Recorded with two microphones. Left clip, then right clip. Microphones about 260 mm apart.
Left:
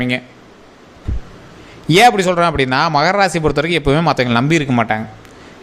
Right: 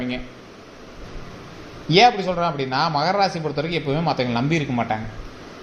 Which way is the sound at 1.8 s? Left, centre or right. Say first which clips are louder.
Left 5 dB; left.